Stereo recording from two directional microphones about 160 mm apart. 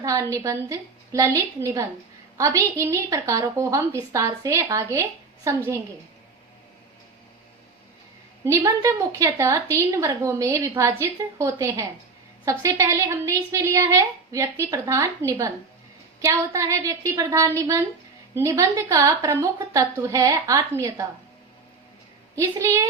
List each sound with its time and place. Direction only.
0.0 s a woman's voice: 20° right (ahead or behind)
8.4 s a woman's voice: 20° right (ahead or behind)
22.4 s a woman's voice: 20° right (ahead or behind)